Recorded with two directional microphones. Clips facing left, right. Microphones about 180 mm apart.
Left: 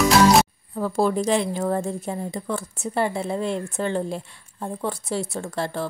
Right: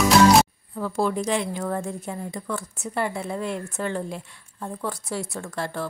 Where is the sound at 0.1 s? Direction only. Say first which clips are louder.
Right 2 dB; centre (ahead or behind).